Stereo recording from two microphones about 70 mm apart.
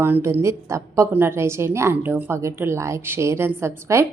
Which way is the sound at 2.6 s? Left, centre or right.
Right.